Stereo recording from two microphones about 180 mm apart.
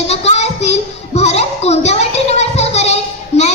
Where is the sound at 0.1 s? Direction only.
35° left (ahead or behind).